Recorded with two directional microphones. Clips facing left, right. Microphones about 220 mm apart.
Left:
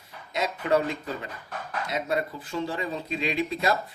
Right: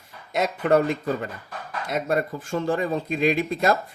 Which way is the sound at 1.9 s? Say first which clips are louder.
Right 5 dB; 50° right (ahead or behind).